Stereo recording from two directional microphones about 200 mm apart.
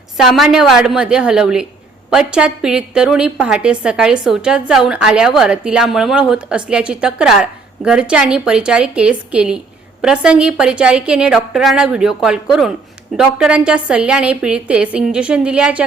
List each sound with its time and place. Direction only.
0.2 s a woman's voice: centre (ahead or behind)